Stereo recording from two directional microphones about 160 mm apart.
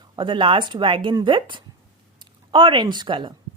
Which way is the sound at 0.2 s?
30° right (ahead or behind).